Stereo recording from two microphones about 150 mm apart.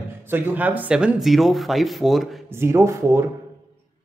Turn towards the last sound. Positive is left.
turn(degrees=-20)  # may be behind; listen again after turning